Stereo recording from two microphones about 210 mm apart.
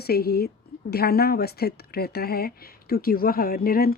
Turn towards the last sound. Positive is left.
turn(degrees=45)  # may be behind; listen again after turning